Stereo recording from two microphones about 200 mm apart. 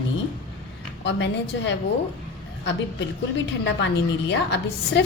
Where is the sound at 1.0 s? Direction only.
65° left (ahead or behind).